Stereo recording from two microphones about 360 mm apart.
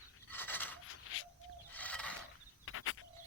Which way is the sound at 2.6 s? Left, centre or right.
Left.